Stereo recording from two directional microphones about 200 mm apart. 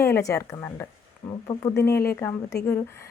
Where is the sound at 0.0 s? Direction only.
15° left (ahead or behind).